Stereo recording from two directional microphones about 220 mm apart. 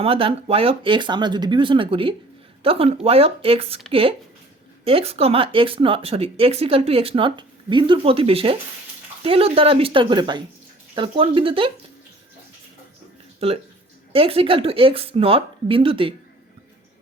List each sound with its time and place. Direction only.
0.0 s speech: 25° right (ahead or behind)
4.9 s speech: 25° right (ahead or behind)
13.4 s speech: 25° right (ahead or behind)